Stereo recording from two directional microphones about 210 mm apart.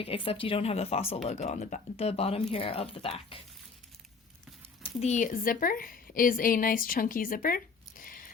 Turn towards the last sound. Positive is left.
turn(degrees=40)  # may be behind; listen again after turning